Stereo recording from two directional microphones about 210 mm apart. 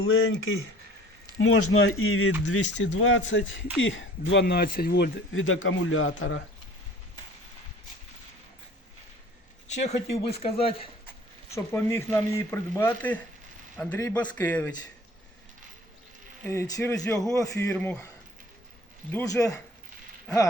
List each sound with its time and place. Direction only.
0.0 s speech: 75° left (ahead or behind)
1.4 s speech: 85° left; by 5.1 s 45° left (ahead or behind)
5.3 s speech: 70° left (ahead or behind)
9.7 s speech: 30° left (ahead or behind)
11.5 s speech: 10° left (ahead or behind)
16.4 s speech: 15° left (ahead or behind)
19.1 s speech: 15° left (ahead or behind)